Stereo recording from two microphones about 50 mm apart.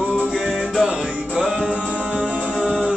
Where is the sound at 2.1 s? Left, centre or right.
Centre.